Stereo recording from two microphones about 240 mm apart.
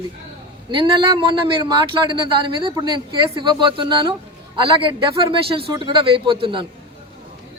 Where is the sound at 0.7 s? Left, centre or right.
Centre.